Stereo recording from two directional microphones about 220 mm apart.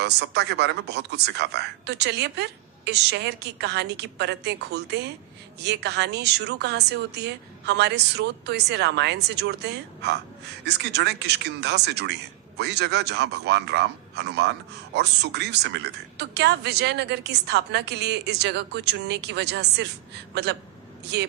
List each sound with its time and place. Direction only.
0.0 s speech: 50° right (ahead or behind)